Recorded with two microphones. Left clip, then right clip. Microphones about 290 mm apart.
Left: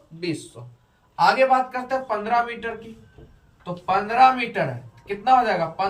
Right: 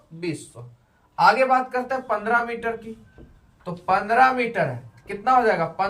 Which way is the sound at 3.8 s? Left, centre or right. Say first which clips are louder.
Left 1 dB; centre.